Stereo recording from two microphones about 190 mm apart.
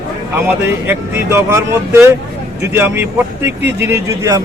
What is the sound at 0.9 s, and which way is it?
Speech, 15° right (ahead or behind).